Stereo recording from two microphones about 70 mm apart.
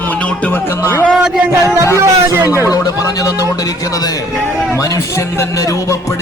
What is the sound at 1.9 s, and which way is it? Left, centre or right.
Speech, right.